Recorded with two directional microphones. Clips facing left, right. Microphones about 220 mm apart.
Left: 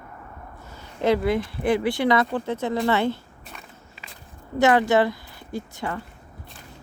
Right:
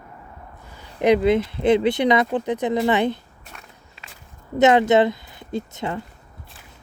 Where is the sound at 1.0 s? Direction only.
20° right (ahead or behind).